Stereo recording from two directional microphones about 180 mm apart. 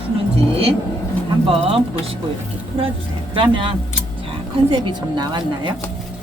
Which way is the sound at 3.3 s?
30° right (ahead or behind).